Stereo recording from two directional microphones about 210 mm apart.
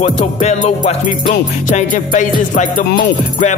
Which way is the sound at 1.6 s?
35° left (ahead or behind).